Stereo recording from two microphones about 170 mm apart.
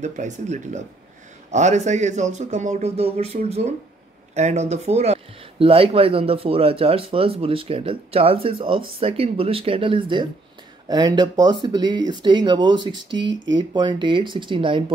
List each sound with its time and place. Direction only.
0.0 s speech: 45° right (ahead or behind); by 14.9 s 30° right (ahead or behind)